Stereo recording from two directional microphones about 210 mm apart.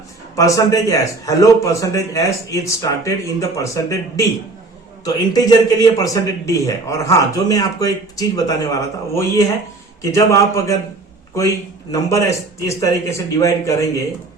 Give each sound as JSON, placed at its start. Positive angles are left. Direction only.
{"t": 0.3, "sound": "a man's voice", "side_deg": 15}